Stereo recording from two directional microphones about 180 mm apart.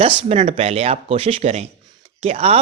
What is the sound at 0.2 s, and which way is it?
Speech, 35° right (ahead or behind).